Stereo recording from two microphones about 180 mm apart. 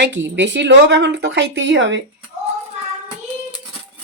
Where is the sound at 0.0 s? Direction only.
90° right.